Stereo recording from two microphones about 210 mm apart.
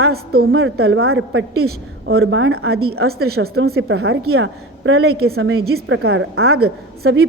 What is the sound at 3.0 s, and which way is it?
Speech, 50° right (ahead or behind).